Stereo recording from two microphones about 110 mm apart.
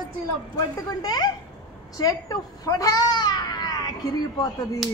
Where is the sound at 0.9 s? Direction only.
35° left (ahead or behind).